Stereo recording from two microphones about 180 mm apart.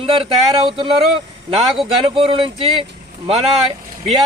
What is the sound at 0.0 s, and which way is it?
Speech, 30° right (ahead or behind).